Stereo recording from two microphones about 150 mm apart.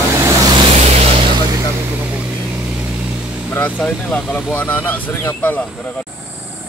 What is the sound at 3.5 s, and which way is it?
Speech, 10° left (ahead or behind).